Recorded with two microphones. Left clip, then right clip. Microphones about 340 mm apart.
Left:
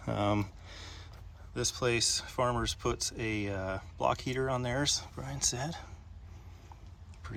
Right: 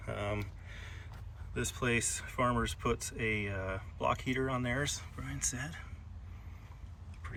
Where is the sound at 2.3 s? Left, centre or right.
Centre.